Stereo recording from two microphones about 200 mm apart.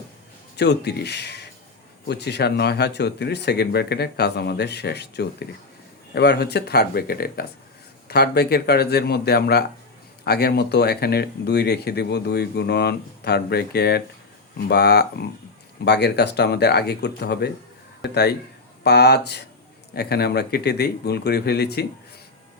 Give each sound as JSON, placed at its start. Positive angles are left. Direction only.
{"t": 0.5, "sound": "speech", "side_deg": 55}